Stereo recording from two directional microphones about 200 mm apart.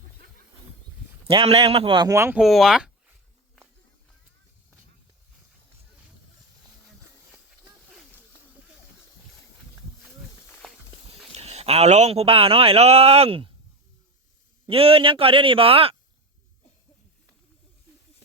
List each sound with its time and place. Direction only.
1.3 s a man's voice: 30° right (ahead or behind)
2.4 s speech: centre (ahead or behind)
10.6 s walk: centre (ahead or behind)
11.1 s a man's voice: 30° right (ahead or behind)
14.7 s a man's voice: 30° right (ahead or behind)